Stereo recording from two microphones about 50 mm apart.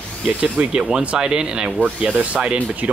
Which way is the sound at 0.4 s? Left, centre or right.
Right.